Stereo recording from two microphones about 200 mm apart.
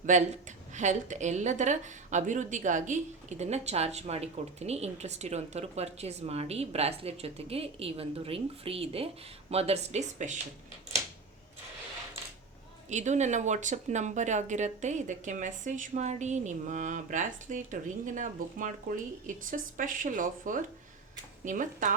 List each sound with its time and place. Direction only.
0.0 s a woman's voice: 35° right (ahead or behind)
12.9 s a woman's voice: 35° right (ahead or behind)